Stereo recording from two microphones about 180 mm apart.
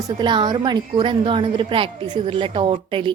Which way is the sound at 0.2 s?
25° right (ahead or behind).